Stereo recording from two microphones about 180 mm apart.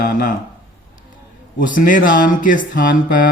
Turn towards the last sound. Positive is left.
turn(degrees=50)  # may be behind; listen again after turning